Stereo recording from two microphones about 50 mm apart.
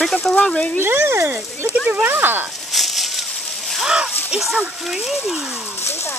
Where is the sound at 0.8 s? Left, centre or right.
Right.